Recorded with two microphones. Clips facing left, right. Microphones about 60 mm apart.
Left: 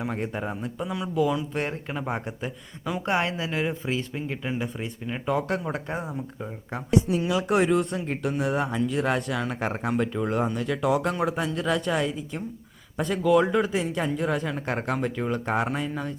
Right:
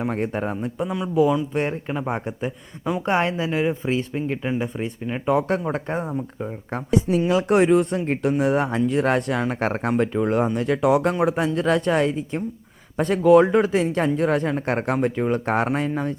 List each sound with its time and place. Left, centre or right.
0.0 s a man's voice: right
1.9 s a man's voice: centre; by 6.0 s right
6.7 s speech: right
7.2 s a man's voice: right
9.6 s speech: right
10.1 s speech: right
10.3 s a man's voice: right
15.4 s speech: right